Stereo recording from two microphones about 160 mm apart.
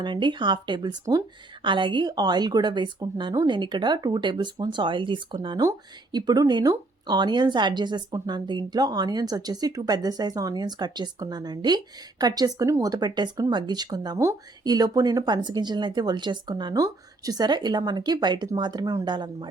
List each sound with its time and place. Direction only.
0.0 s speech: 30° right (ahead or behind)